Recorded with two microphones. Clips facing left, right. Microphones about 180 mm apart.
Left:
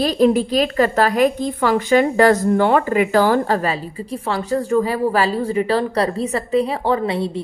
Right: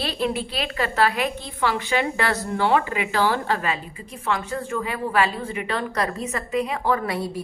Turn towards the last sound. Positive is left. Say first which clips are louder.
# left 5 dB
turn(degrees=25)  # may be behind; listen again after turning